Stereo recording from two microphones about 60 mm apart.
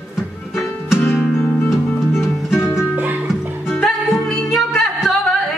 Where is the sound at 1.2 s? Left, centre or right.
Centre.